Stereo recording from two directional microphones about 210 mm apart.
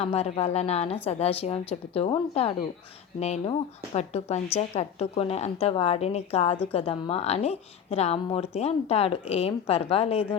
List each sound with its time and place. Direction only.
0.0 s a woman's voice: 30° left (ahead or behind)